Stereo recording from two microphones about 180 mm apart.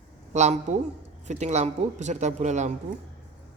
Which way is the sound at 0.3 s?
40° right (ahead or behind).